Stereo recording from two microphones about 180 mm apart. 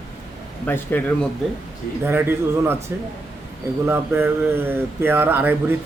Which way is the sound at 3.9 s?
10° right (ahead or behind).